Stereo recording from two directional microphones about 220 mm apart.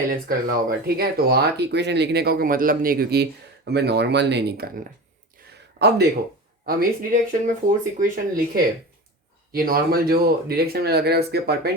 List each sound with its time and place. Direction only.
0.1 s speech: 40° right (ahead or behind)
5.8 s a sound: 55° right (ahead or behind)
6.7 s speech: 40° right (ahead or behind)